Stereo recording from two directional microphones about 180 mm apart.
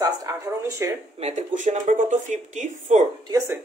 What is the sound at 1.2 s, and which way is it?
Speech, 40° right (ahead or behind).